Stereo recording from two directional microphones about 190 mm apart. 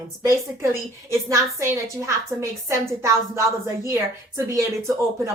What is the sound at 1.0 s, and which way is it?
Speech, 15° right (ahead or behind).